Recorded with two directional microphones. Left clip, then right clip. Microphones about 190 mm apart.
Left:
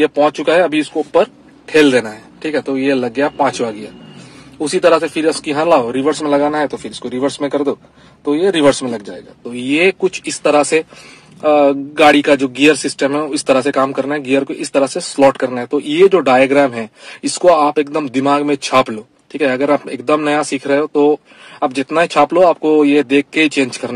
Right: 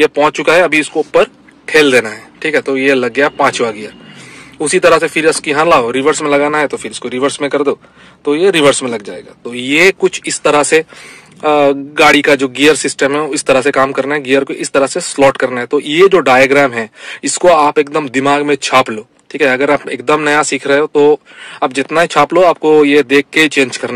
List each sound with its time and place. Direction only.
0.0 s speech: centre (ahead or behind)